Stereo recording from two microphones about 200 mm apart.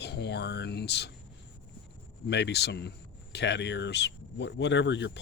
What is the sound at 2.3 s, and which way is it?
Speech, 55° left (ahead or behind).